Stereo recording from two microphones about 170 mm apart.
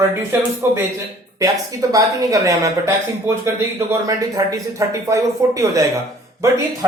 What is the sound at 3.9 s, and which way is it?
Speech, 20° right (ahead or behind).